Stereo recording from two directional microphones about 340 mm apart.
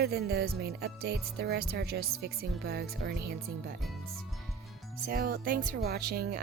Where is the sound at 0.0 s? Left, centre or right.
Right.